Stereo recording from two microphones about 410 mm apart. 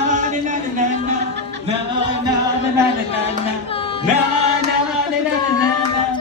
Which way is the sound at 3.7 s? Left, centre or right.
Centre.